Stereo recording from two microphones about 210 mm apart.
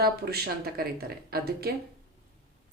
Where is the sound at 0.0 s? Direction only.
50° right (ahead or behind).